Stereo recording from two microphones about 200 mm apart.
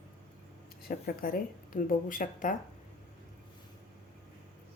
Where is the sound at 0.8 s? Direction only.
45° left (ahead or behind).